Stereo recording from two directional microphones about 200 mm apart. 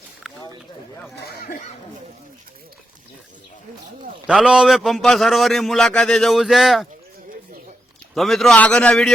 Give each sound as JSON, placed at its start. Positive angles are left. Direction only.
{"t": 1.2, "sound": "speech", "side_deg": 50}
{"t": 4.3, "sound": "a man's voice", "side_deg": -5}
{"t": 8.1, "sound": "a man's voice", "side_deg": 0}